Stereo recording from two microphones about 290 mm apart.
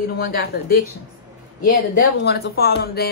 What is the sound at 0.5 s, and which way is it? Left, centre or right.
Speech, left.